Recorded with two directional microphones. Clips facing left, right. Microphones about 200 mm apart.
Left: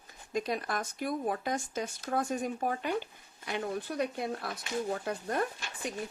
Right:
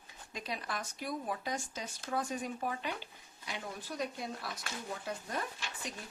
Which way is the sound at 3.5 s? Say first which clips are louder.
Left 8 dB; 60° left (ahead or behind).